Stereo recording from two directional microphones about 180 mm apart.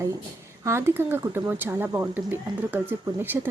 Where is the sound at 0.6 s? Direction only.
15° right (ahead or behind).